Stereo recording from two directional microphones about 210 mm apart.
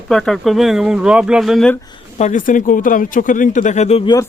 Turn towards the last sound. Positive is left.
turn(degrees=30)  # may be behind; listen again after turning